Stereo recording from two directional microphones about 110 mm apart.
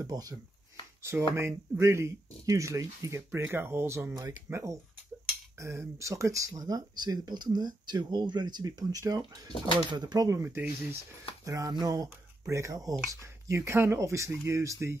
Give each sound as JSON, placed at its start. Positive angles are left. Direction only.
{"t": 0.0, "sound": "speech", "side_deg": -35}